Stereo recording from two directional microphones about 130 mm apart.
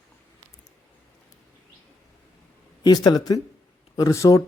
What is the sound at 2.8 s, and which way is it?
Speech, 30° left (ahead or behind).